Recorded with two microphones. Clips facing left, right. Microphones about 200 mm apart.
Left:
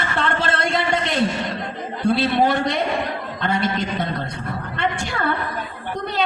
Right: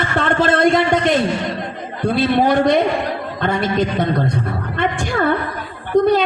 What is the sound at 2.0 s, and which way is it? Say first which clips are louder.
A woman's voice: right 3 dB; 50° right (ahead or behind).